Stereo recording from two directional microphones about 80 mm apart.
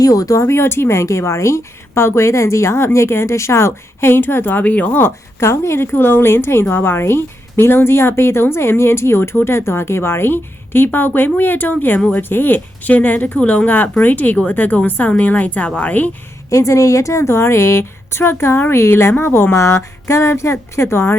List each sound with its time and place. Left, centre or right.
0.0 s a woman's voice: left
5.4 s a woman's voice: left; by 16.0 s centre
16.5 s a woman's voice: left